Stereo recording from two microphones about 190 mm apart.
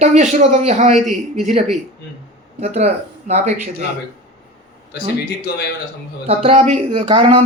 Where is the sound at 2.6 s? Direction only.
35° right (ahead or behind).